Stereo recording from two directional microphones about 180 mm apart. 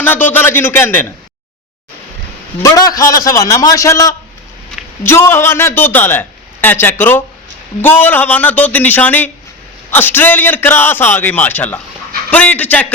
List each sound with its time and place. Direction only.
0.0 s a man's voice: 10° left (ahead or behind)
2.6 s a man's voice: 20° left (ahead or behind)